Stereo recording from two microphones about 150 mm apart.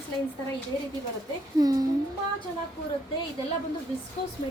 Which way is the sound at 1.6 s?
25° right (ahead or behind).